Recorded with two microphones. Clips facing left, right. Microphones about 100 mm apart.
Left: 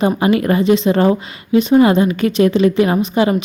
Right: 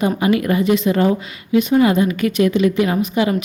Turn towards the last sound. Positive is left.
turn(degrees=35)  # may be behind; listen again after turning